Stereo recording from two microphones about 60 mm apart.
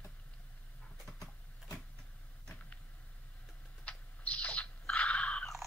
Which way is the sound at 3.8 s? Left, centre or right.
Left.